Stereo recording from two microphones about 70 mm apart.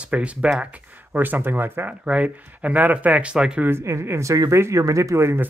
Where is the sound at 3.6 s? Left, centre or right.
Right.